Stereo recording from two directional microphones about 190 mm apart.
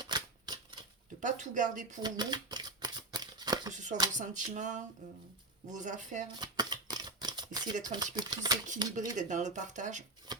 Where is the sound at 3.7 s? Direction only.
40° right (ahead or behind).